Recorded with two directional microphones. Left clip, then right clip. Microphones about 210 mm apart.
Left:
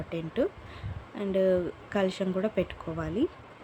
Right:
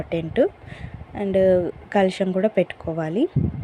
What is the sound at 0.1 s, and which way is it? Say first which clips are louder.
Speech: right 9 dB; 25° right (ahead or behind).